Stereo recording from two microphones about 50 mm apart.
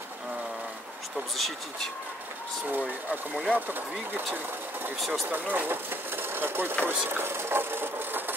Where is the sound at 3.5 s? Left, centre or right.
Right.